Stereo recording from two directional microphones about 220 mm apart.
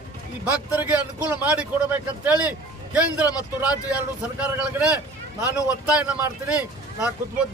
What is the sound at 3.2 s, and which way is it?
Speech, 15° left (ahead or behind).